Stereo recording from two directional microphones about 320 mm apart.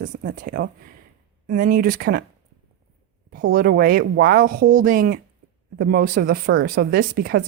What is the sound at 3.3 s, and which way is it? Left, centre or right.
Speech, right.